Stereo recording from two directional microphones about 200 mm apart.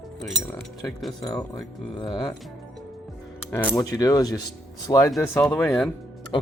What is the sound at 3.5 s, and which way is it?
Cutlery, 10° left (ahead or behind).